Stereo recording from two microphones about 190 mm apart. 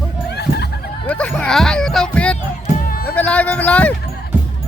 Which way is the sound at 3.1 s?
10° left (ahead or behind).